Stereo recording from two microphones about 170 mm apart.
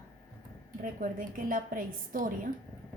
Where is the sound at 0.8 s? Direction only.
55° right (ahead or behind).